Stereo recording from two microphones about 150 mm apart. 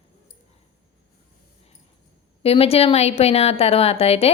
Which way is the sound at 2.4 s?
40° left (ahead or behind).